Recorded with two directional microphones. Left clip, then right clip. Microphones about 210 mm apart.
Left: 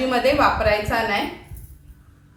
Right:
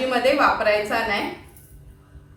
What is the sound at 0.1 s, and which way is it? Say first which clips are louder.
A woman's voice: even; 5° left (ahead or behind).